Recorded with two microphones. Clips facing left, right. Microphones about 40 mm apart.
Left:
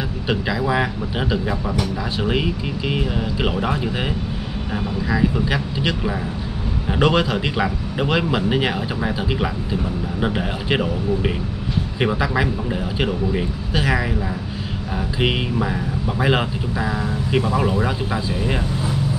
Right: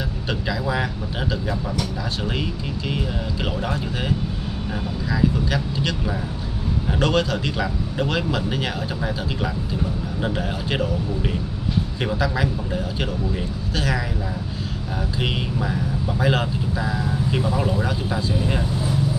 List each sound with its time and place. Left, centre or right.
0.3 s speech: centre
5.1 s speech: centre
15.1 s speech: centre